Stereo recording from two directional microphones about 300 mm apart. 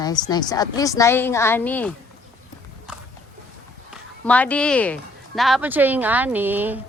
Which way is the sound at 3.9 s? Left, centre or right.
Centre.